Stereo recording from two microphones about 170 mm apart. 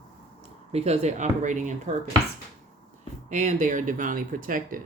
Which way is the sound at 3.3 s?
45° right (ahead or behind).